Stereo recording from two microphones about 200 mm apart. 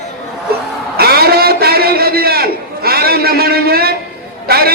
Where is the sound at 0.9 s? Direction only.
50° right (ahead or behind).